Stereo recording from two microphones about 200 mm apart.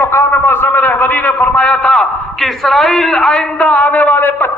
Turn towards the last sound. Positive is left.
turn(degrees=10)  # may be behind; listen again after turning